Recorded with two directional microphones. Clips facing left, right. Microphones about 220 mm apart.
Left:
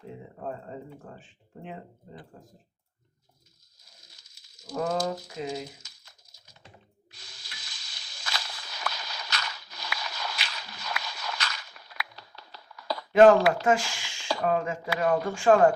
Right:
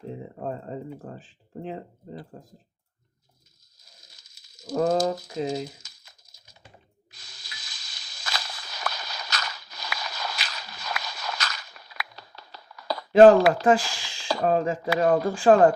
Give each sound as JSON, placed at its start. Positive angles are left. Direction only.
{"t": 0.9, "sound": "speech", "side_deg": -35}
{"t": 4.7, "sound": "speech", "side_deg": -40}
{"t": 7.1, "sound": "a sound", "side_deg": -40}